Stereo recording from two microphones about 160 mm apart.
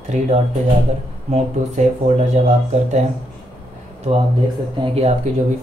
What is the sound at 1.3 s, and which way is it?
Speech, 45° right (ahead or behind).